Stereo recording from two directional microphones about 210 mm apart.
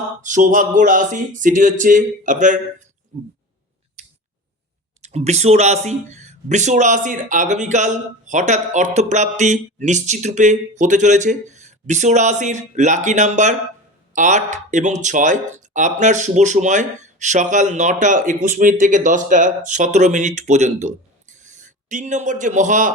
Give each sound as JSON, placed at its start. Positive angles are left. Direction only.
{"t": 0.2, "sound": "speech", "side_deg": -35}
{"t": 5.0, "sound": "a man's voice", "side_deg": -30}